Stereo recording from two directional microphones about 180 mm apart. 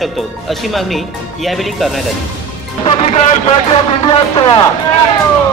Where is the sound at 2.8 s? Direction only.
35° left (ahead or behind).